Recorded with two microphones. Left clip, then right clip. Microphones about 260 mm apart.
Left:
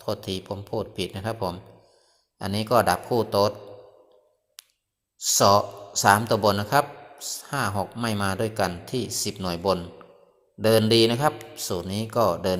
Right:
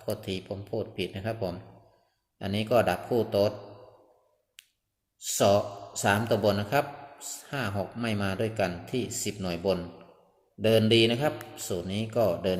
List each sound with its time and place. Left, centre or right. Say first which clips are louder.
0.0 s speech: left 4 dB; centre
5.2 s a man's voice: left 5 dB; centre